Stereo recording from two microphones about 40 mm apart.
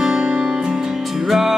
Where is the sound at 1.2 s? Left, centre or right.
Centre.